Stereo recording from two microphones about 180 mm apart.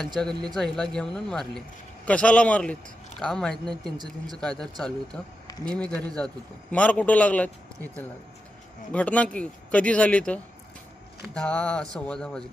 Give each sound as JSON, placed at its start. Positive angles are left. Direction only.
{"t": 0.4, "sound": "a man's voice", "side_deg": 5}